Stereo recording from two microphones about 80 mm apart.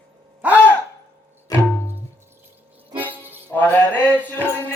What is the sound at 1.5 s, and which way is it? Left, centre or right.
Music, left.